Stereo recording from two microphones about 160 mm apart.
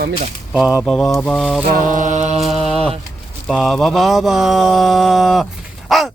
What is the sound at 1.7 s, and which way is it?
Mantra, 55° right (ahead or behind).